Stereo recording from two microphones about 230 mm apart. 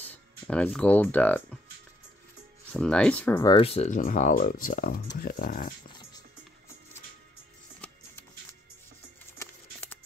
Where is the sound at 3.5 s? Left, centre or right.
Left.